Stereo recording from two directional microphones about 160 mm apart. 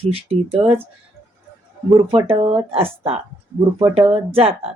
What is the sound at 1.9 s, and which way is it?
Speech, 35° right (ahead or behind).